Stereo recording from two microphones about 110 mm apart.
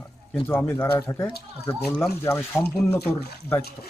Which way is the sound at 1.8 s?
5° left (ahead or behind).